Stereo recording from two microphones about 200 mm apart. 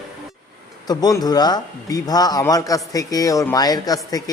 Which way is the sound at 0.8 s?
20° left (ahead or behind).